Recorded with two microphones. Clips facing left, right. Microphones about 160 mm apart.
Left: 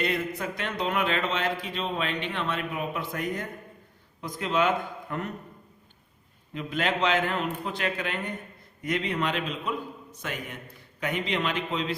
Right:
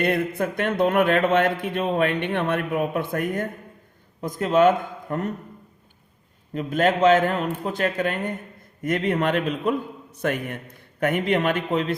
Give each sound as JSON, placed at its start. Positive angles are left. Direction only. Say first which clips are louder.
{"t": 0.0, "sound": "a man's voice", "louder": "right 6 dB", "side_deg": -55}
{"t": 6.5, "sound": "a man's voice", "louder": "right 7 dB", "side_deg": -45}